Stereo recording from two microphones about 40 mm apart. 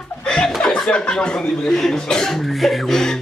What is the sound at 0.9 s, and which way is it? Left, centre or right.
Speech, left.